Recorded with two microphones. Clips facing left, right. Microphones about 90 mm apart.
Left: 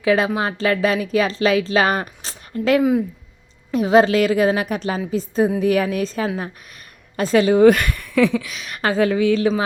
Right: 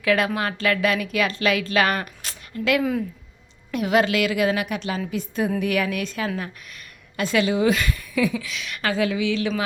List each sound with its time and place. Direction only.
0.0 s a woman's voice: 25° left (ahead or behind); by 8.0 s 55° left (ahead or behind)
8.0 s a sound: 75° left (ahead or behind)
8.4 s a woman's voice: 40° left (ahead or behind)